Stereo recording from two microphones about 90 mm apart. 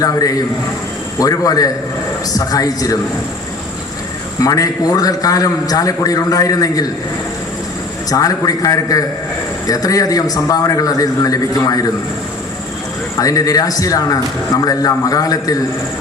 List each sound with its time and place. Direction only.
0.0 s a man's voice: 40° left (ahead or behind)
4.4 s a man's voice: 40° left (ahead or behind)
8.1 s a man's voice: 40° left (ahead or behind)
13.1 s a man's voice: 40° left (ahead or behind)